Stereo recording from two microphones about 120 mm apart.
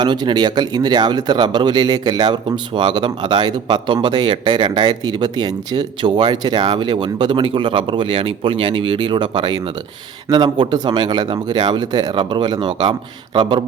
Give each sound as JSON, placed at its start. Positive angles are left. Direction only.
{"t": 0.0, "sound": "speech", "side_deg": -40}